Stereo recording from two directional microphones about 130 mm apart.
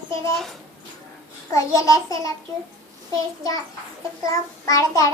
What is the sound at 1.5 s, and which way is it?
Speech, 25° left (ahead or behind).